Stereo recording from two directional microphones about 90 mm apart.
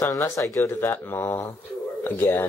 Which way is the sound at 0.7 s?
25° left (ahead or behind).